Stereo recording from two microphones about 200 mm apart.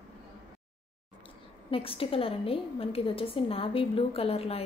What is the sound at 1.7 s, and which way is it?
A woman's voice, 30° left (ahead or behind).